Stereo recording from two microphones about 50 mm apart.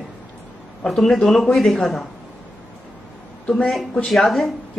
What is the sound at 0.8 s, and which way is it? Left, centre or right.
Speech, centre.